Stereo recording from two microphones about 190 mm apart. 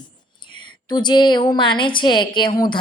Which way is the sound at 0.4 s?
20° left (ahead or behind).